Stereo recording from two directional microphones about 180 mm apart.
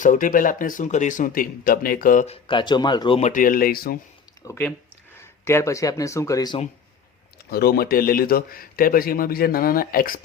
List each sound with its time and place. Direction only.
0.0 s a man's voice: 45° left (ahead or behind)
2.2 s speech: 30° left (ahead or behind)
3.2 s a man's voice: 45° left (ahead or behind)
4.4 s speech: 10° left (ahead or behind)
7.5 s a man's voice: 60° left (ahead or behind)